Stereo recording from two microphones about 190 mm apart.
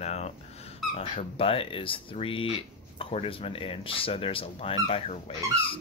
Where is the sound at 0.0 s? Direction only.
35° left (ahead or behind).